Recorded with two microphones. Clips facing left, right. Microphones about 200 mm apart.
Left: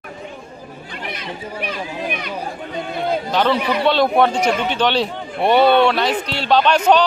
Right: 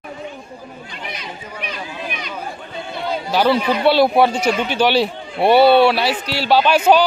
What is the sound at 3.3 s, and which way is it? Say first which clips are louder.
A man's voice: right 4 dB; 5° right (ahead or behind).